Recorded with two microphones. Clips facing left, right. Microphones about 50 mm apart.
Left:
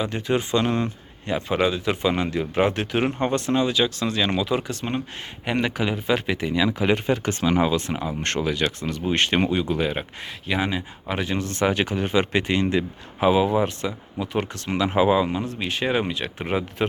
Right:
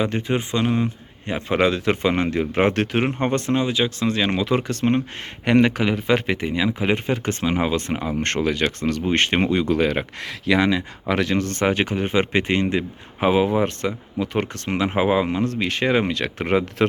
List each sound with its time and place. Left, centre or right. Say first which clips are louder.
0.0 s speech: right 1 dB; right
0.6 s a man's voice: right 2 dB; centre
1.5 s speech: right 4 dB; right
1.9 s speech: right 3 dB; right
3.0 s speech: right 1 dB; right
4.4 s speech: right 3 dB; right
9.5 s speech: right 4 dB; right
11.1 s speech: right 5 dB; right
15.3 s speech: right 4 dB; right